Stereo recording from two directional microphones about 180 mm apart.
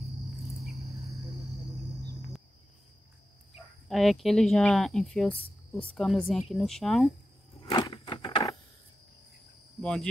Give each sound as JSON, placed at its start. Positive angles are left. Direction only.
{"t": 3.9, "sound": "speech", "side_deg": 0}
{"t": 7.6, "sound": "a sound", "side_deg": 25}
{"t": 9.8, "sound": "speech", "side_deg": 5}